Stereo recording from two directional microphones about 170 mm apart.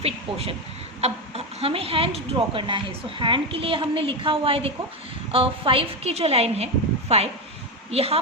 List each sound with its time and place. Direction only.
0.0 s speech: 35° right (ahead or behind)